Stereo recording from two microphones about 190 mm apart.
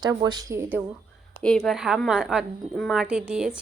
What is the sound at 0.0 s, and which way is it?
Speech, 20° right (ahead or behind).